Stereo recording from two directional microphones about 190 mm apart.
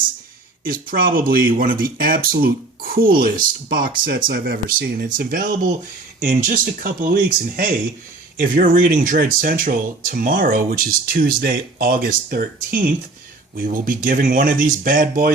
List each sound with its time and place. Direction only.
0.6 s speech: 50° right (ahead or behind)